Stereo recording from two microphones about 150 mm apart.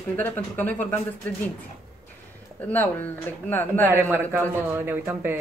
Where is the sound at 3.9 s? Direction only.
15° right (ahead or behind).